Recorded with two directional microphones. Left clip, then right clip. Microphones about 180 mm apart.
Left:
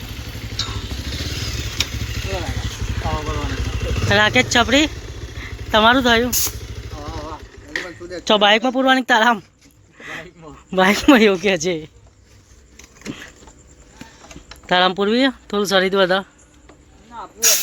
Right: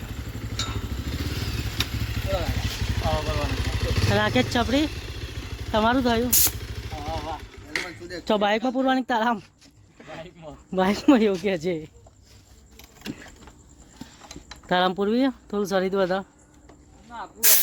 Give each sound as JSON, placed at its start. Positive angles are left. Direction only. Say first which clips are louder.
{"t": 1.1, "sound": "vehicle", "louder": "left 6 dB", "side_deg": -50}
{"t": 2.9, "sound": "vehicle", "louder": "left 2 dB", "side_deg": -5}
{"t": 8.1, "sound": "speech", "louder": "left 9 dB", "side_deg": 0}
{"t": 10.0, "sound": "a sound", "louder": "left 7 dB", "side_deg": 0}
{"t": 10.7, "sound": "speech", "louder": "left 7 dB", "side_deg": 0}
{"t": 14.7, "sound": "speech", "louder": "left 6 dB", "side_deg": -5}